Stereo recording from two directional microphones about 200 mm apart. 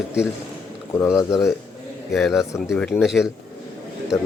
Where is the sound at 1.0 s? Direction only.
15° left (ahead or behind).